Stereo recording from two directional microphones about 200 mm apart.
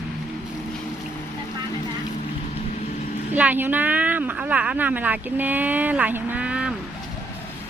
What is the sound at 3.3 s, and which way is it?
Speech, 10° right (ahead or behind).